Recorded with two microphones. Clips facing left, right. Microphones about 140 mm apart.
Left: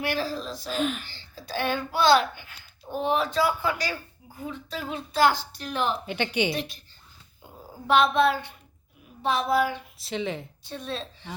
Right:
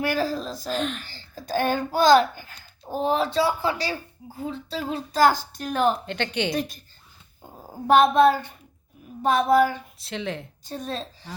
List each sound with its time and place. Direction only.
0.0 s a woman's voice: 45° right (ahead or behind)
0.8 s speech: 5° left (ahead or behind)
1.0 s a child's voice: 45° right (ahead or behind)
6.1 s speech: 10° left (ahead or behind)
6.5 s a woman's voice: 45° right (ahead or behind)
7.9 s a woman's voice: 45° right (ahead or behind)
10.0 s speech: centre (ahead or behind)
10.6 s a child's voice: 45° right (ahead or behind)